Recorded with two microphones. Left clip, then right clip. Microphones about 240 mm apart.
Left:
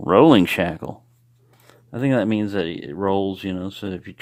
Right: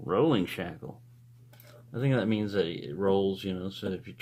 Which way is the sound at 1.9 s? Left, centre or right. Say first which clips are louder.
Left 9 dB; left.